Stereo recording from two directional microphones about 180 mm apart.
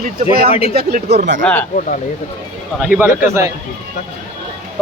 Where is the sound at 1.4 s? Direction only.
10° left (ahead or behind).